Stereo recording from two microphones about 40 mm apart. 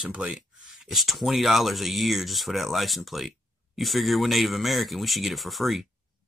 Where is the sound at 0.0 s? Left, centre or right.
Right.